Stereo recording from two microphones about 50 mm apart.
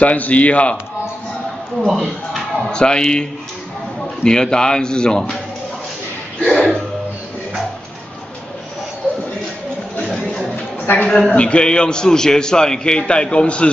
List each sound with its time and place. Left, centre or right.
0.0 s a man's voice: left
1.9 s speech: centre
2.7 s a man's voice: centre
6.4 s speech: centre
10.0 s music: centre
11.1 s a man's voice: centre